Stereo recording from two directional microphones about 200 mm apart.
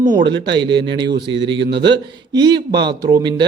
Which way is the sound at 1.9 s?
20° right (ahead or behind).